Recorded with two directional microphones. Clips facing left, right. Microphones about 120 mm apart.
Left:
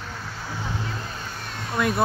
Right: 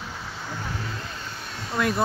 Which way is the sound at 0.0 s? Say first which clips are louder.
Left 1 dB; 5° right (ahead or behind).